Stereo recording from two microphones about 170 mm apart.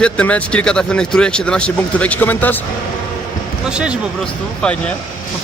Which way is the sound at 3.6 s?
5° right (ahead or behind).